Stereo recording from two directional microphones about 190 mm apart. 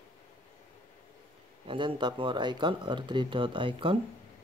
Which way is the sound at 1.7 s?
25° right (ahead or behind).